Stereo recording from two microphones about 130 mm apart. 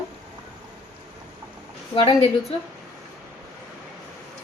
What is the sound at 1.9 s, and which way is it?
Speech, 40° left (ahead or behind).